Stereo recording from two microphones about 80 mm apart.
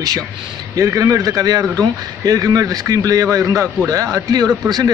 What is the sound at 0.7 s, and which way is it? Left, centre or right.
A man's voice, right.